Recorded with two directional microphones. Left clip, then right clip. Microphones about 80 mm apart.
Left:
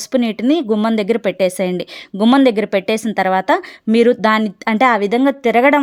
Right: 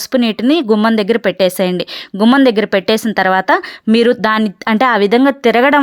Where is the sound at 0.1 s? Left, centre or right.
Centre.